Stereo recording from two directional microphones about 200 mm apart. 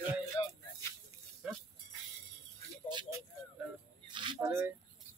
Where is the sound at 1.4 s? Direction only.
5° right (ahead or behind).